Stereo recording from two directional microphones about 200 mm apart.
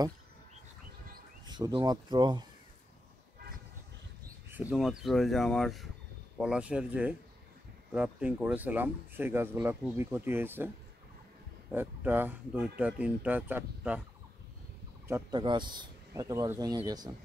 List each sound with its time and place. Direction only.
1.4 s speech: 20° right (ahead or behind)
4.5 s speech: 5° right (ahead or behind)
11.7 s speech: 10° right (ahead or behind)
15.0 s speech: 15° right (ahead or behind)